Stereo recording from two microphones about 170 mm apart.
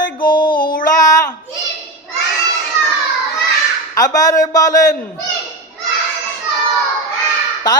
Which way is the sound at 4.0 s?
20° left (ahead or behind).